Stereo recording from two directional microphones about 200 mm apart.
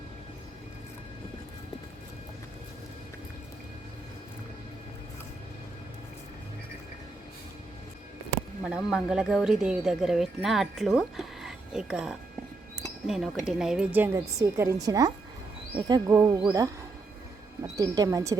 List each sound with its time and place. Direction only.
8.6 s a woman's voice: 5° right (ahead or behind); by 16.6 s 20° right (ahead or behind)
17.7 s a woman's voice: 20° right (ahead or behind)